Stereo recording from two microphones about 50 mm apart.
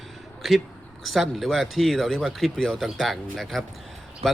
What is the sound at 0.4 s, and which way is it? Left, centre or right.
A man's voice, centre.